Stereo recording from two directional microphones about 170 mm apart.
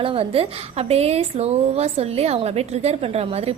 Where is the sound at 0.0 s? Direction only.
35° right (ahead or behind).